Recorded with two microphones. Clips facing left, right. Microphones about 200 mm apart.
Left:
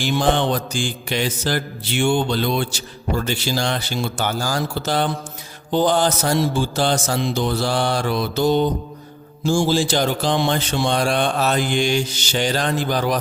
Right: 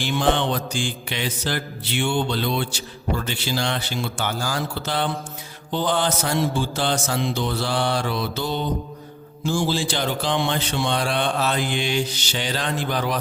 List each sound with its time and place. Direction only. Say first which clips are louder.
0.0 s mantra: left 2 dB; 40° left (ahead or behind)
9.6 s mantra: left 5 dB; 40° left (ahead or behind)